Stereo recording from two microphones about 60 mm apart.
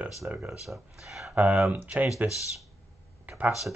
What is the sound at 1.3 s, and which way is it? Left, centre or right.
Speech, right.